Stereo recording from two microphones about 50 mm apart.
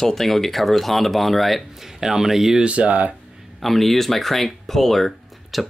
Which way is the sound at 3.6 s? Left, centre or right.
Centre.